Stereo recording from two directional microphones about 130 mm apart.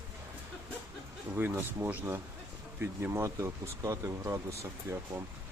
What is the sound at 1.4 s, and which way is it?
Speech, 15° right (ahead or behind).